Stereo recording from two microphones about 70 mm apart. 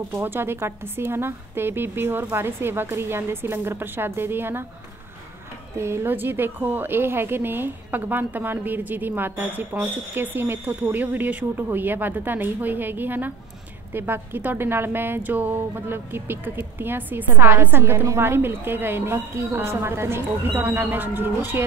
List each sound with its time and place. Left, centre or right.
0.1 s speech: right
5.8 s a woman's voice: right